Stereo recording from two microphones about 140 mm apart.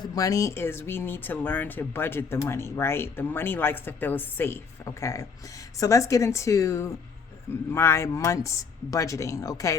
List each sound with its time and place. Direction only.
0.0 s speech: 25° left (ahead or behind)